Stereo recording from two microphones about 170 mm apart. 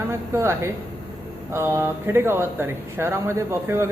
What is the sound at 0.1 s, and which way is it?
A woman's voice, 15° right (ahead or behind).